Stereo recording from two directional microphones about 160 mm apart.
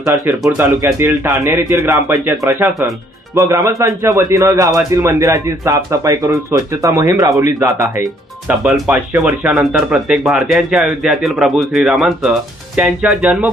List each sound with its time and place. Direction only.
0.0 s speech: 15° right (ahead or behind)
8.4 s speech: 5° right (ahead or behind)